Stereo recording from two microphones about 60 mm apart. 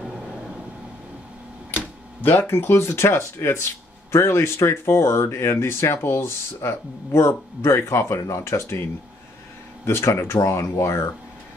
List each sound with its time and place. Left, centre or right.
1.8 s speech: left
9.8 s speech: left